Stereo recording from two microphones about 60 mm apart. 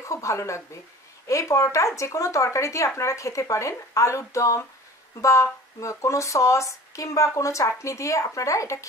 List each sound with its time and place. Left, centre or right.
0.0 s speech: left